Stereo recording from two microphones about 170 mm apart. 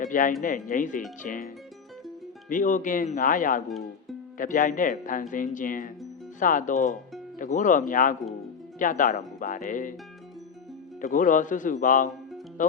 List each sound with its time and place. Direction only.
0.0 s speech: 50° left (ahead or behind)
2.5 s speech: 50° left (ahead or behind)
11.0 s speech: 50° left (ahead or behind)